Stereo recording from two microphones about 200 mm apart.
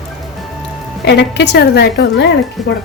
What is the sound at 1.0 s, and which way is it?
A woman's voice, 60° left (ahead or behind).